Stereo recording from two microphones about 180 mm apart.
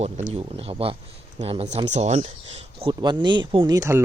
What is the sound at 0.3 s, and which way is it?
Speech, 35° right (ahead or behind).